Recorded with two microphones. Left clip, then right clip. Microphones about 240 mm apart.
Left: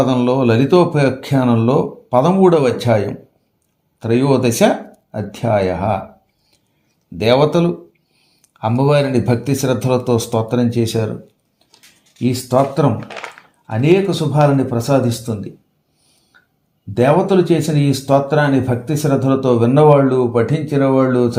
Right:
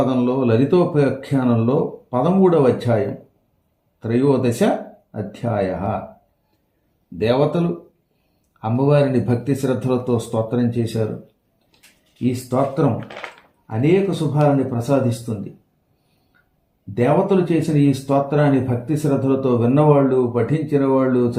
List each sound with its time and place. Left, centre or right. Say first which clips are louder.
0.0 s speech: left 4 dB; left
4.0 s speech: left 3 dB; left
7.2 s speech: left 5 dB; left
12.3 s speech: left 5 dB; left
16.9 s speech: left 4 dB; left